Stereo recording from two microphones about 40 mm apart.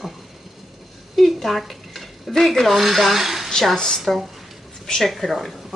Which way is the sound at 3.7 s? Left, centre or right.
Centre.